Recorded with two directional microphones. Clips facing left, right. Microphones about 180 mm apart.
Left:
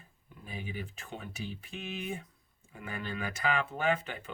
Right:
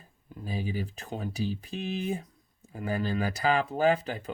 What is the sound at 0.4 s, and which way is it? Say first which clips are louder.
Speech: right 8 dB; 35° right (ahead or behind).